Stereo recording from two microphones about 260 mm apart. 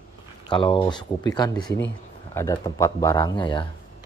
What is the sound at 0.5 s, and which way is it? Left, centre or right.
Speech, centre.